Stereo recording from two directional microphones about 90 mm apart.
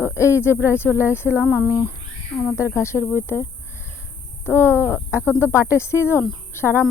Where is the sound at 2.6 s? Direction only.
30° left (ahead or behind).